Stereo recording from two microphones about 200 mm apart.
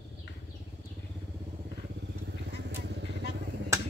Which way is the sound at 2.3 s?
60° right (ahead or behind).